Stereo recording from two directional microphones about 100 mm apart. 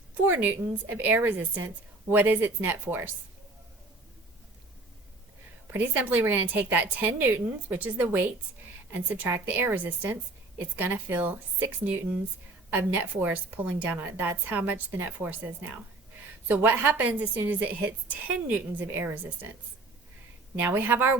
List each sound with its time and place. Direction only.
0.1 s a woman's voice: 20° right (ahead or behind)
5.7 s a woman's voice: 15° right (ahead or behind)
16.5 s a woman's voice: 20° right (ahead or behind)
20.6 s a woman's voice: 20° right (ahead or behind)